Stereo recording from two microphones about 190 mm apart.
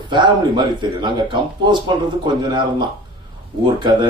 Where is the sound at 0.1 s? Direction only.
25° right (ahead or behind).